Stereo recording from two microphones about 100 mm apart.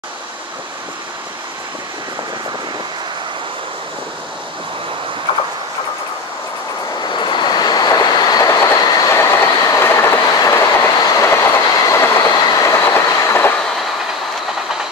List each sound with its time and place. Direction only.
7.0 s train: 50° left (ahead or behind)
9.1 s train: 25° left (ahead or behind)